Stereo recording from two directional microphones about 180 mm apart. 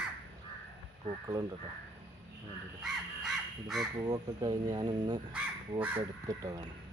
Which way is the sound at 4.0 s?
25° right (ahead or behind).